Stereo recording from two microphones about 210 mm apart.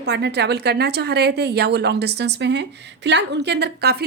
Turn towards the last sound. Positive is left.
turn(degrees=-50)  # may be behind; listen again after turning